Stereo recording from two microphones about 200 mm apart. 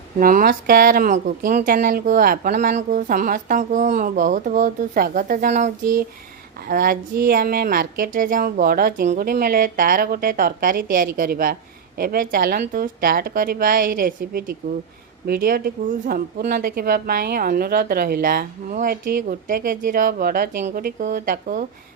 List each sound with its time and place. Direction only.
0.2 s a woman's voice: 45° right (ahead or behind)